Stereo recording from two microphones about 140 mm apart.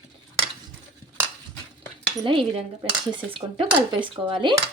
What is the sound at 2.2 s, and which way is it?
Speech, 40° right (ahead or behind).